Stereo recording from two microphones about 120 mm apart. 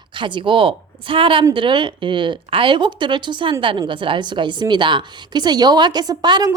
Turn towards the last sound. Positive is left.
turn(degrees=-35)  # may be behind; listen again after turning